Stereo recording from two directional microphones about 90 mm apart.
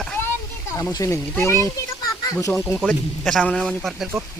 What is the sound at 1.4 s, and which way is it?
A child's voice, 35° left (ahead or behind).